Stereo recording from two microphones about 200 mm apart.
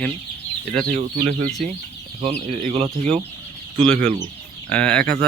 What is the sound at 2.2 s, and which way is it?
Speech, 35° right (ahead or behind).